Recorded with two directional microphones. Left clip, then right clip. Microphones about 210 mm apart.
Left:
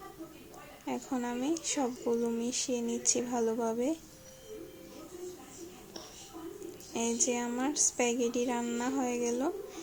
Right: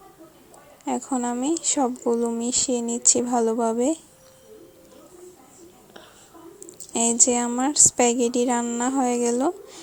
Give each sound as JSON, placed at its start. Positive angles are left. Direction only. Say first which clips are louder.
{"t": 0.9, "sound": "speech", "louder": "right 10 dB", "side_deg": -35}
{"t": 6.9, "sound": "speech", "louder": "right 10 dB", "side_deg": -40}